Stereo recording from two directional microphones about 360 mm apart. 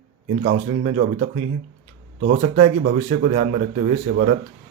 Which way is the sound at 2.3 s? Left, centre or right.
Centre.